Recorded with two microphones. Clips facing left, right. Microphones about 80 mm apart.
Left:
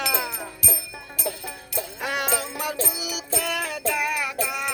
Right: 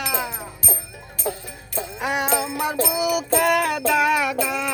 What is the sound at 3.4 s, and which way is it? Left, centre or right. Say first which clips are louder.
Child singing: right 8 dB; right.